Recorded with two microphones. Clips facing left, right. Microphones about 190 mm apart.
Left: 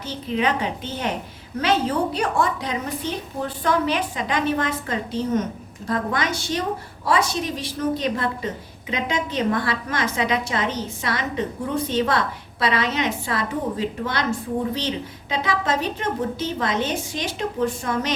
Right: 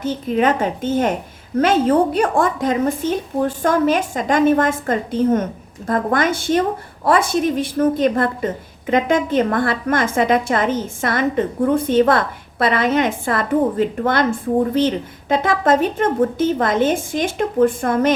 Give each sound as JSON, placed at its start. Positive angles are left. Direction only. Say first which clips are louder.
{"t": 0.0, "sound": "a woman's voice", "louder": "right 6 dB", "side_deg": -50}